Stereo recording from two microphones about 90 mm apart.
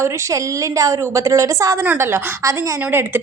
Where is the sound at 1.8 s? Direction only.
25° right (ahead or behind).